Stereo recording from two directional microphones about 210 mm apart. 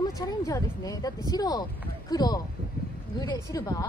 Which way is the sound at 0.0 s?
15° left (ahead or behind).